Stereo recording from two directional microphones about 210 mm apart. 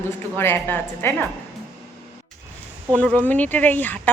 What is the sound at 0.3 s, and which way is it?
Speech, 10° left (ahead or behind).